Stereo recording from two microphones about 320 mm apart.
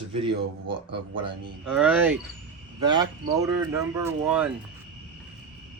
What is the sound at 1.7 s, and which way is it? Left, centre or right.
Speech, centre.